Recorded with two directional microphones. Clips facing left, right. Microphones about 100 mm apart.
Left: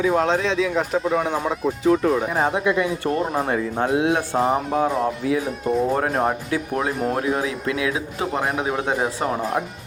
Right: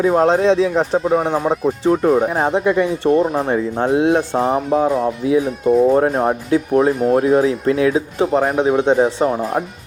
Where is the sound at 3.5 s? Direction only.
30° right (ahead or behind).